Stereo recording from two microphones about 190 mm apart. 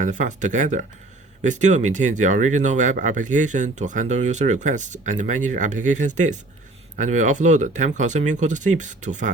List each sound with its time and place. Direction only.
0.0 s speech: 40° right (ahead or behind)